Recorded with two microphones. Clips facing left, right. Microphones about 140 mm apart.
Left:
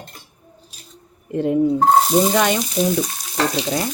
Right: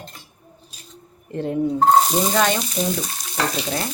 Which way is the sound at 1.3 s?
10° left (ahead or behind).